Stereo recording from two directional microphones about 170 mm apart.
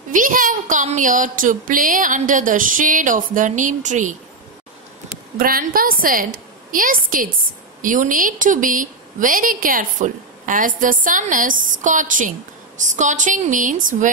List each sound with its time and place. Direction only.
0.1 s a woman's voice: 50° right (ahead or behind)
5.4 s a woman's voice: 55° right (ahead or behind)